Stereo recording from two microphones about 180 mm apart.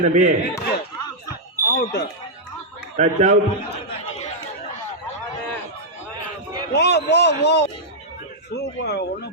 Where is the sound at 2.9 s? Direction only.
40° right (ahead or behind).